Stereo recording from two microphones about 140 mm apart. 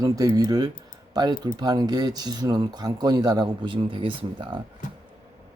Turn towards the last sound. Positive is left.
turn(degrees=-35)  # may be behind; listen again after turning